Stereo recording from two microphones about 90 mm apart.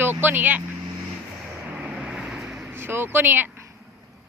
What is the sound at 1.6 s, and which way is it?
Vehicle, 15° right (ahead or behind).